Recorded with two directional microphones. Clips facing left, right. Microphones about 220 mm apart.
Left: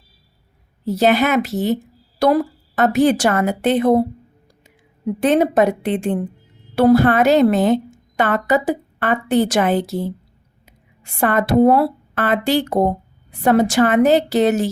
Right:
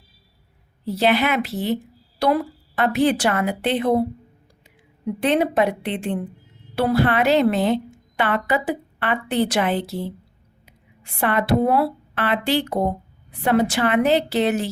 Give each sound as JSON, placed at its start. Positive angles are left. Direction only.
{"t": 0.9, "sound": "speech", "side_deg": 45}
{"t": 5.2, "sound": "a woman's voice", "side_deg": 45}